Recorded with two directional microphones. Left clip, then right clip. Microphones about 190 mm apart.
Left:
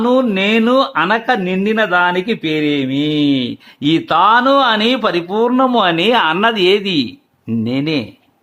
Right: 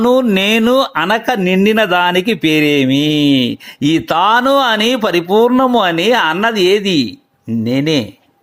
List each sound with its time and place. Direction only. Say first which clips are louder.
0.0 s speech: right 2 dB; 35° right (ahead or behind); by 8.0 s 20° right (ahead or behind)